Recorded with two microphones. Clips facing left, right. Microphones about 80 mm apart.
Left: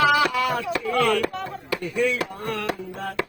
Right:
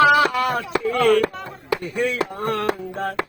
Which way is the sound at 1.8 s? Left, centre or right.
Right.